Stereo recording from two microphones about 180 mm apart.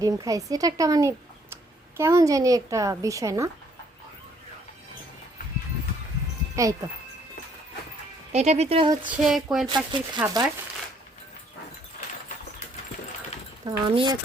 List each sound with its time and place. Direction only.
0.0 s a woman's voice: 20° right (ahead or behind)
8.3 s speech: 35° right (ahead or behind)
9.0 s a sound: centre (ahead or behind)
9.6 s speech: 25° right (ahead or behind)
13.7 s speech: 25° right (ahead or behind)